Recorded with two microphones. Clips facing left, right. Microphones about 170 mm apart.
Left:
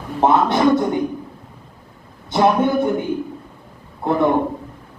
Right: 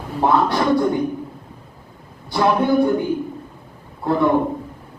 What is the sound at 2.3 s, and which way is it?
Speech, 20° left (ahead or behind).